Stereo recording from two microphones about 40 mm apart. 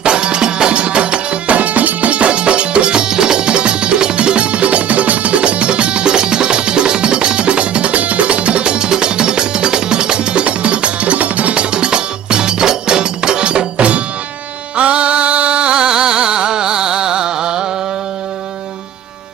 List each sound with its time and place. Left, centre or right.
0.0 s music: right
1.5 s music: right; by 17.7 s centre